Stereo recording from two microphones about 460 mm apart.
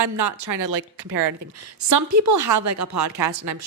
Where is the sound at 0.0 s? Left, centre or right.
Right.